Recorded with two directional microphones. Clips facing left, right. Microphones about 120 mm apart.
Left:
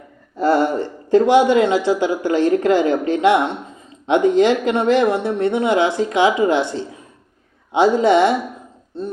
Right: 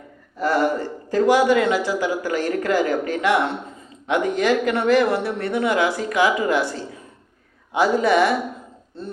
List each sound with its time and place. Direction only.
0.3 s speech: 25° left (ahead or behind)